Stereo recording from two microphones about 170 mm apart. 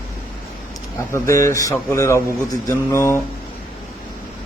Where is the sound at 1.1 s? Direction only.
15° left (ahead or behind).